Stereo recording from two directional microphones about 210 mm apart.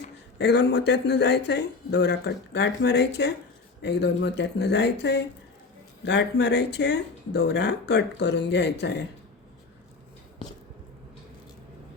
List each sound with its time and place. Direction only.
0.3 s speech: 55° left (ahead or behind)